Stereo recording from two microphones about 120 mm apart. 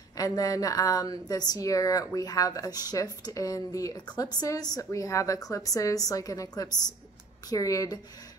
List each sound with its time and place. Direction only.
0.2 s a woman's voice: 30° left (ahead or behind)